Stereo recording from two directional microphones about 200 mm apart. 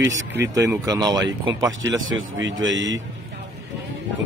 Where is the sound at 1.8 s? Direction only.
80° right.